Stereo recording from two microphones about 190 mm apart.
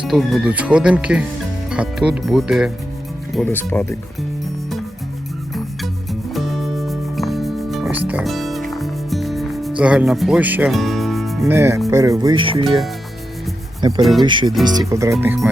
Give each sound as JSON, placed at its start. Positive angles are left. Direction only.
{"t": 0.0, "sound": "speech", "side_deg": 0}
{"t": 3.3, "sound": "speech", "side_deg": 10}
{"t": 5.5, "sound": "music", "side_deg": 0}
{"t": 11.4, "sound": "speech", "side_deg": -15}
{"t": 12.6, "sound": "speech", "side_deg": 0}
{"t": 14.0, "sound": "speech", "side_deg": 0}
{"t": 14.3, "sound": "speech", "side_deg": -25}